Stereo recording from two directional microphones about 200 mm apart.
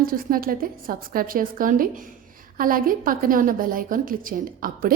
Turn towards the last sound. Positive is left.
turn(degrees=-45)  # may be behind; listen again after turning